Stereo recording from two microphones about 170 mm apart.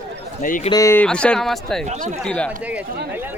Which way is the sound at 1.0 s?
5° left (ahead or behind).